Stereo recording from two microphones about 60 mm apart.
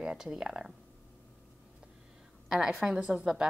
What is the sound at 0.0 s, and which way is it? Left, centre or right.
Speech, centre.